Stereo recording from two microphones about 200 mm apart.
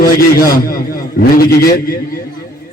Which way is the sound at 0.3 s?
45° left (ahead or behind).